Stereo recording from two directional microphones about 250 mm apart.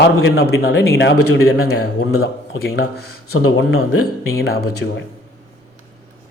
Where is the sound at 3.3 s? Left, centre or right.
Left.